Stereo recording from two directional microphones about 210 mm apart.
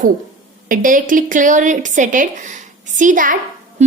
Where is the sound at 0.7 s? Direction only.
40° right (ahead or behind).